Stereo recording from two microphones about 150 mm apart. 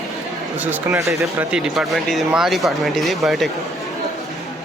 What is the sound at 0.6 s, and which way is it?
Speech, 10° right (ahead or behind).